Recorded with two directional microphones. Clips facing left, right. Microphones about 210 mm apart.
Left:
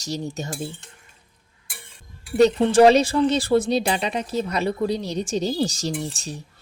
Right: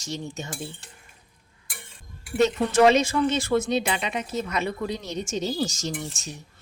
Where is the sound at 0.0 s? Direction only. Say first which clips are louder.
Left 4 dB; 40° left (ahead or behind).